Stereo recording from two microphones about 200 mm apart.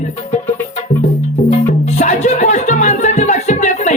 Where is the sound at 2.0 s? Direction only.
35° left (ahead or behind).